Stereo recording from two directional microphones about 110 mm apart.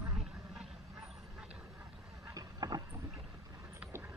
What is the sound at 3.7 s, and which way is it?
Vehicle, 15° right (ahead or behind).